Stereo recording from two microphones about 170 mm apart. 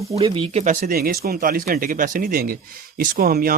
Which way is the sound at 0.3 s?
30° right (ahead or behind).